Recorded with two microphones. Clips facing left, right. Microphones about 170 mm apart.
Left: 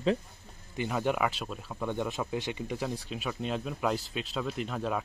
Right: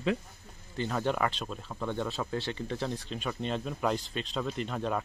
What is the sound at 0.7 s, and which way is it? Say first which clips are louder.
Speech: left 1 dB; 10° left (ahead or behind).